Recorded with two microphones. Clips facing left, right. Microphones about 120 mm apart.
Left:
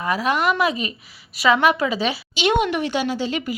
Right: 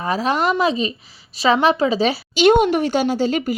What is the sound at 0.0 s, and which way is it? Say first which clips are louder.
A woman's voice: right 1 dB; 30° right (ahead or behind).